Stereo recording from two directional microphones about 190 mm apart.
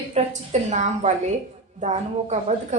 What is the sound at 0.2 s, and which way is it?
Speech, 35° right (ahead or behind).